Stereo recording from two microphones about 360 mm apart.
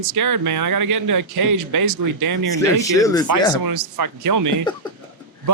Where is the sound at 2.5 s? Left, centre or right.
Centre.